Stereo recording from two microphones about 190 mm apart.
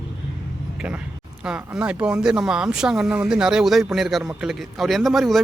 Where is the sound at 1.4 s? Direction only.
5° right (ahead or behind).